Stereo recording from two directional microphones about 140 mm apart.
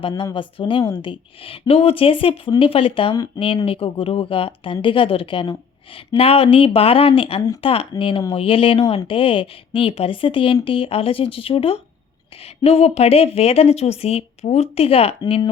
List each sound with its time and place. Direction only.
0.0 s a woman's voice: 35° left (ahead or behind)